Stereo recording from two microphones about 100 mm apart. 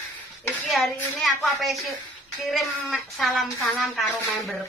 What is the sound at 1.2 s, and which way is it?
Speech, centre (ahead or behind).